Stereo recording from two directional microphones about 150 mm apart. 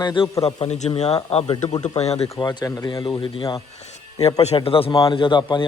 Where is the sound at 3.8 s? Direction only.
45° left (ahead or behind).